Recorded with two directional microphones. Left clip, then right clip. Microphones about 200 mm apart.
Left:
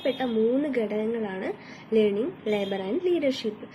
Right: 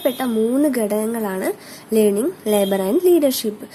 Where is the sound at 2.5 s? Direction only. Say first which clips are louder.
Right 11 dB; 50° right (ahead or behind).